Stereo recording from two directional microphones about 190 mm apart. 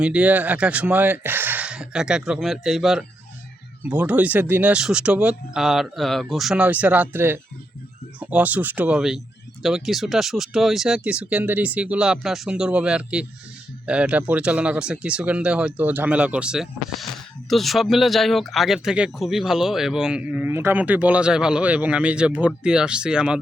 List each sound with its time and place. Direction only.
0.0 s speech: 5° right (ahead or behind)